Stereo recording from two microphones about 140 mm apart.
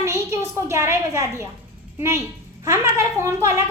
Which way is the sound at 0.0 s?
20° right (ahead or behind).